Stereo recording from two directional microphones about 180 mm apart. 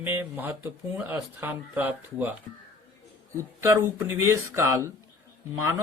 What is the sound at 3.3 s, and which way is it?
Speech, 15° right (ahead or behind).